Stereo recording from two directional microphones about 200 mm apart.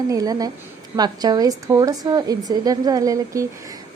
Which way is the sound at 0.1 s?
20° right (ahead or behind).